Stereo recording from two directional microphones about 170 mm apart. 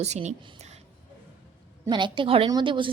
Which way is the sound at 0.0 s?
40° right (ahead or behind).